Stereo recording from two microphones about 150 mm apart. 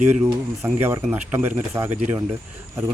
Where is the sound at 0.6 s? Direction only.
15° right (ahead or behind).